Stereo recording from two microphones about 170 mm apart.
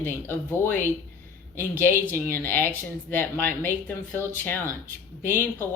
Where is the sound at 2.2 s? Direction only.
15° left (ahead or behind).